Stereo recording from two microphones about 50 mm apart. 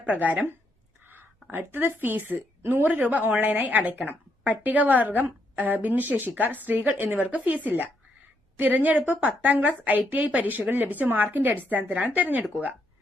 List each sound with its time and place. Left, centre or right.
0.0 s a woman's voice: right
1.1 s speech: right
2.6 s speech: right
2.8 s a woman's voice: right